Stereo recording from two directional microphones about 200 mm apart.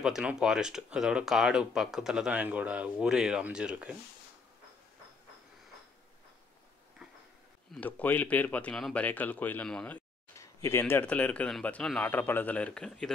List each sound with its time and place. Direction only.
0.0 s speech: 5° right (ahead or behind)
7.7 s speech: 10° left (ahead or behind)